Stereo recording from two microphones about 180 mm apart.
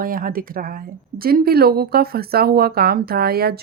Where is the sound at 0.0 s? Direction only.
50° right (ahead or behind).